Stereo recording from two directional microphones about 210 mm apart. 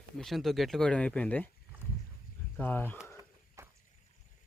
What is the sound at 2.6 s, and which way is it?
Speech, 10° left (ahead or behind).